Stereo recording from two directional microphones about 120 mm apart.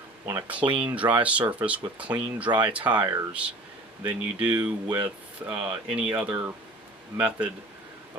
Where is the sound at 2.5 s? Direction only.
40° right (ahead or behind).